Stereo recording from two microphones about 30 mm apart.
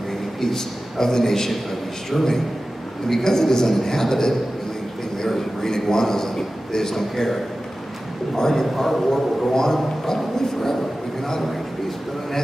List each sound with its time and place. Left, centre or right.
0.4 s a woman's voice: centre
8.4 s a woman's voice: centre
8.6 s a man's voice: centre
9.5 s a woman's voice: centre